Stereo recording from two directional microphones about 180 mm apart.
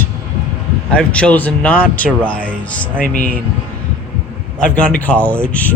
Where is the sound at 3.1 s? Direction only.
55° right (ahead or behind).